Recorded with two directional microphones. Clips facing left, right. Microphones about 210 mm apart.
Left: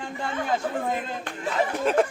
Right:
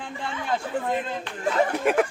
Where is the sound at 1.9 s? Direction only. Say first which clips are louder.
Even; 15° right (ahead or behind).